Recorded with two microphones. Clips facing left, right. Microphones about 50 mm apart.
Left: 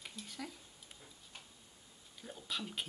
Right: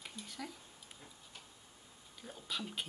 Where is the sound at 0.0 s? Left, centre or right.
Centre.